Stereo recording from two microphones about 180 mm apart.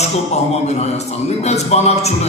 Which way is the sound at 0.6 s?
35° left (ahead or behind).